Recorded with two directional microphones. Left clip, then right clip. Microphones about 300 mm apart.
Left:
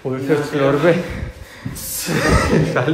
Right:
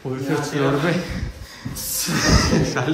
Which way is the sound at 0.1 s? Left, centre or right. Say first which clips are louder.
Left 5 dB; centre.